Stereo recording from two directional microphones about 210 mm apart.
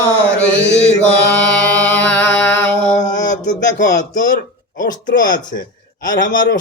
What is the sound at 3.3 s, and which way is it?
Speech, 40° left (ahead or behind).